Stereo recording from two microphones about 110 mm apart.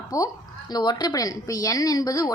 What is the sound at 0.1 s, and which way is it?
Speech, 30° left (ahead or behind).